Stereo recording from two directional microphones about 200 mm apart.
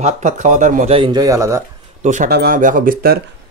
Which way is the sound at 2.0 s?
40° right (ahead or behind).